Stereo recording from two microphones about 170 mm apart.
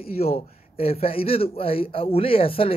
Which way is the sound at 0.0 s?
35° left (ahead or behind).